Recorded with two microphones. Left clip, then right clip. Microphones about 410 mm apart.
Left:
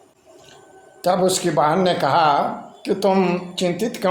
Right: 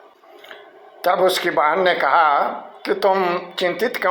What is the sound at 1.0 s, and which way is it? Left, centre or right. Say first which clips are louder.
Speech: right 2 dB; centre.